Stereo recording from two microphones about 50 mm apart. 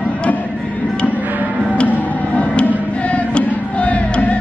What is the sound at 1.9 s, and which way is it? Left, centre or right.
Music, left.